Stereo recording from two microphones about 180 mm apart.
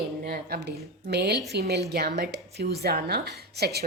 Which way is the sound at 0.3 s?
55° right (ahead or behind).